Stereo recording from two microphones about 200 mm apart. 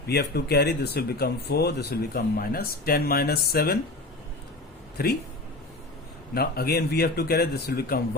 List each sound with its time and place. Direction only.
0.1 s speech: 55° left (ahead or behind)
6.3 s speech: 50° left (ahead or behind)